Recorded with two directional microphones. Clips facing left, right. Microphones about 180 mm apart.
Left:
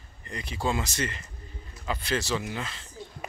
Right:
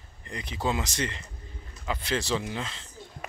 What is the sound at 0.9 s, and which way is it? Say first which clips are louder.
Speech: even; 25° right (ahead or behind).